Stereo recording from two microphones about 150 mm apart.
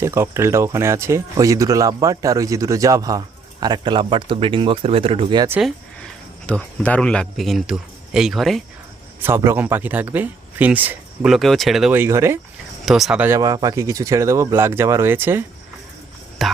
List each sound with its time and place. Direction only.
0.0 s speech: 20° right (ahead or behind); by 5.5 s 35° right (ahead or behind)
5.5 s speech: 5° left (ahead or behind)
9.2 s speech: 15° right (ahead or behind); by 11.9 s centre (ahead or behind)
11.9 s speech: 15° right (ahead or behind)
12.8 s speech: centre (ahead or behind)
13.2 s speech: 20° right (ahead or behind)
16.4 s a sound: centre (ahead or behind)